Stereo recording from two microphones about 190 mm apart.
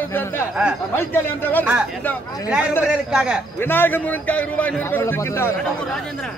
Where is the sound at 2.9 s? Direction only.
5° right (ahead or behind).